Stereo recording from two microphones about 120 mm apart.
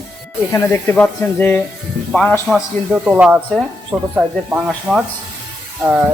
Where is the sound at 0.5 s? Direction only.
20° left (ahead or behind).